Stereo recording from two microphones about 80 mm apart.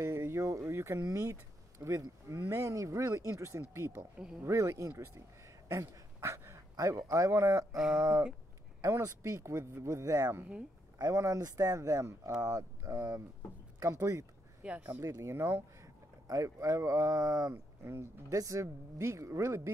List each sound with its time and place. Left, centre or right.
0.0 s a sound: right
1.1 s speech: right
5.7 s a sound: right
6.8 s speech: right
7.7 s speech: centre
8.8 s speech: right
13.7 s speech: right
14.6 s speech: centre
15.2 s speech: right
16.3 s speech: right
17.8 s speech: right